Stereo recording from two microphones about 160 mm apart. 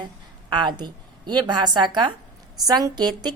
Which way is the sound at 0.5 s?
30° right (ahead or behind).